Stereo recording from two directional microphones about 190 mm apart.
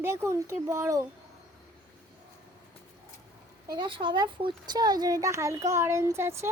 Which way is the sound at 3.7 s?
25° right (ahead or behind).